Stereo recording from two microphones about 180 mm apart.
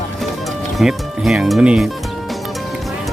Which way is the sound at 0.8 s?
Centre (ahead or behind).